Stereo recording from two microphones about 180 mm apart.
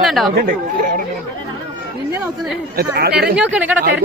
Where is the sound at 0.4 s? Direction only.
45° right (ahead or behind).